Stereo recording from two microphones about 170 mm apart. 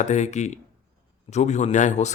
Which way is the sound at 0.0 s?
45° left (ahead or behind).